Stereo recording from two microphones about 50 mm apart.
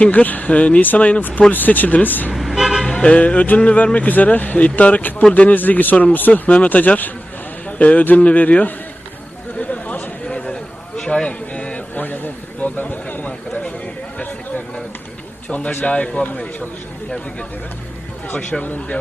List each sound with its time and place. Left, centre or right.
0.0 s speech: left
2.3 s vehicle: centre
2.8 s music: centre; by 3.6 s left
3.6 s speech: left
9.6 s chatter: left
10.2 s a sound: centre
12.0 s a sound: left
15.4 s speech: left
18.6 s speech: left